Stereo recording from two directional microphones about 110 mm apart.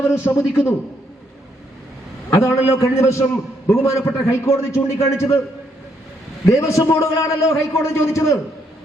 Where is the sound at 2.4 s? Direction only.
25° left (ahead or behind).